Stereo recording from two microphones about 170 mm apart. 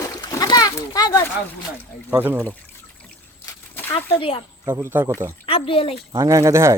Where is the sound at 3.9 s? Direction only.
30° left (ahead or behind).